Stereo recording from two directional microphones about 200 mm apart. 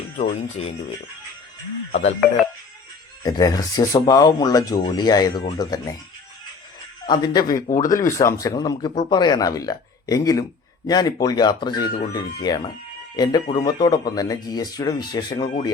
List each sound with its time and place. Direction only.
0.2 s speech: 35° left (ahead or behind)
1.9 s speech: 35° left (ahead or behind)
3.2 s speech: 20° left (ahead or behind)
7.0 s speech: 20° left (ahead or behind)
7.4 s speech: 45° left (ahead or behind)
7.8 s speech: 15° left (ahead or behind)